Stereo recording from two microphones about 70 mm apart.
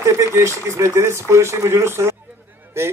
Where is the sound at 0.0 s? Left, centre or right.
Right.